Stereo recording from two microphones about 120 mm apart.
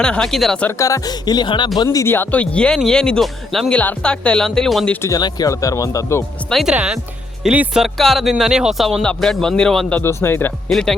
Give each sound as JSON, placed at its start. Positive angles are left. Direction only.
{"t": 0.0, "sound": "speech", "side_deg": 5}
{"t": 0.8, "sound": "speech", "side_deg": 25}
{"t": 5.0, "sound": "speech", "side_deg": 30}
{"t": 6.5, "sound": "speech", "side_deg": 0}
{"t": 10.0, "sound": "speech", "side_deg": 20}
{"t": 10.7, "sound": "speech", "side_deg": 5}